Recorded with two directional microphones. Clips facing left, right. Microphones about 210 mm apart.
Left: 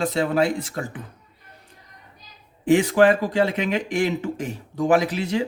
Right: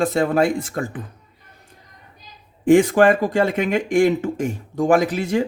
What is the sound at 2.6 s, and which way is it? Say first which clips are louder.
Speech: right 3 dB; 45° right (ahead or behind).